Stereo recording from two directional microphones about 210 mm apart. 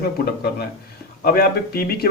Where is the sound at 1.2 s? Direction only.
45° left (ahead or behind).